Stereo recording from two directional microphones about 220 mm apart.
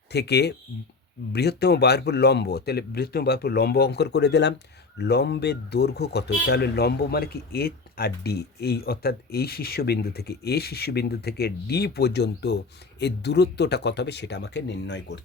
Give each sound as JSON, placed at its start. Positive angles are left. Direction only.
{"t": 0.1, "sound": "speech", "side_deg": 50}